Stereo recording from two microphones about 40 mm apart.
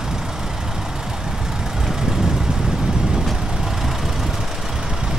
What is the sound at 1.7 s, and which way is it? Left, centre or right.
Vehicle, centre.